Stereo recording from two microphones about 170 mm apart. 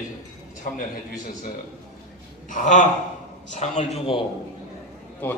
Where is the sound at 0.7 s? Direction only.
55° left (ahead or behind).